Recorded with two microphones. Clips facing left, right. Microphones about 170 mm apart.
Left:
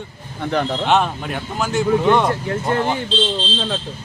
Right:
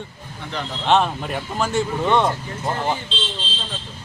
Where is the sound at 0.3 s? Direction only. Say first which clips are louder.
Left 9 dB; 55° left (ahead or behind).